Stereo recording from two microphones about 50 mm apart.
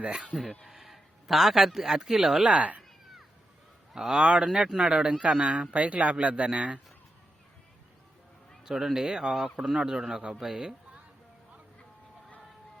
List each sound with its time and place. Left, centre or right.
0.3 s a man's voice: centre
2.5 s speech: right
3.9 s a man's voice: centre
8.6 s a man's voice: centre